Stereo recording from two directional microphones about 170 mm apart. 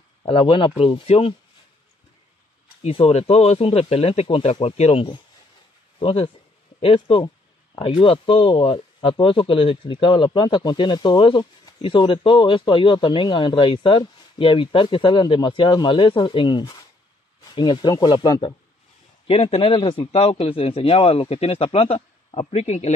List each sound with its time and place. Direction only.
0.2 s speech: 30° left (ahead or behind)
2.8 s speech: 35° left (ahead or behind)
19.2 s speech: 35° left (ahead or behind)